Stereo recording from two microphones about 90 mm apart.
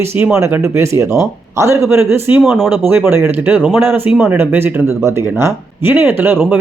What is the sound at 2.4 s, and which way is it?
Speech, centre (ahead or behind).